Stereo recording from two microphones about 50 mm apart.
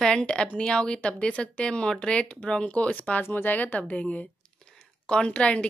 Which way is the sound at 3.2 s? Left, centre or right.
Left.